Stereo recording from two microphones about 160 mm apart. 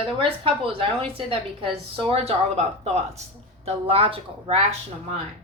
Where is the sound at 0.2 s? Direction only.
35° right (ahead or behind).